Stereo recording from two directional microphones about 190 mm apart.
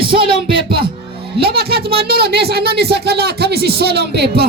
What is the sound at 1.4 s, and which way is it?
Speech, 55° right (ahead or behind).